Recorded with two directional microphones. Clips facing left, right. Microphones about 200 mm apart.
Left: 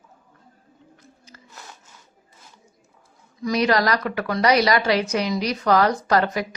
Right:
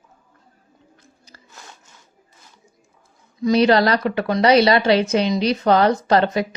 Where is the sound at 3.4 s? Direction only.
30° right (ahead or behind).